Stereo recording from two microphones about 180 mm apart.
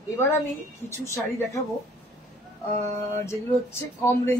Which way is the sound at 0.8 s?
15° left (ahead or behind).